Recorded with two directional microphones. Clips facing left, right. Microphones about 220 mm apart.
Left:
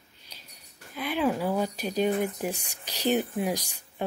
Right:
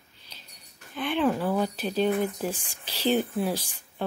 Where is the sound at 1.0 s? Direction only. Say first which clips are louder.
Right 2 dB; 10° left (ahead or behind).